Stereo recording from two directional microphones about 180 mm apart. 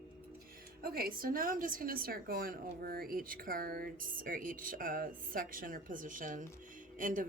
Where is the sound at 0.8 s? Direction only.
55° right (ahead or behind).